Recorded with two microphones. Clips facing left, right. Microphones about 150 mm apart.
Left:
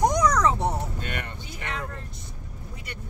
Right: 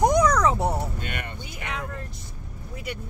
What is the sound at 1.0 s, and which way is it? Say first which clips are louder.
Vehicle: even; 40° left (ahead or behind).